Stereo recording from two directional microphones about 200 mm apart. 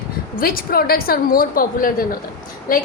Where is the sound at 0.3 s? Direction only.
45° left (ahead or behind).